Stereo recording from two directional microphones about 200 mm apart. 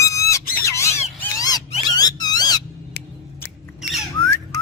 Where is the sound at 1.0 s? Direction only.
35° left (ahead or behind).